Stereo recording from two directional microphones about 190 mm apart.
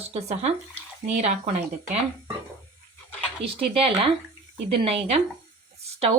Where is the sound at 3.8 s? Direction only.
30° right (ahead or behind).